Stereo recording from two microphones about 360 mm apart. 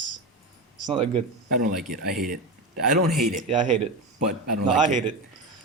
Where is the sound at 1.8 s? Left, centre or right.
Centre.